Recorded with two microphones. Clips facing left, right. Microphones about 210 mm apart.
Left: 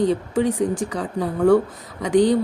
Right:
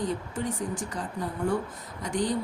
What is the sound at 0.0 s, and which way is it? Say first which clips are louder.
Speech: left 11 dB; 75° left (ahead or behind).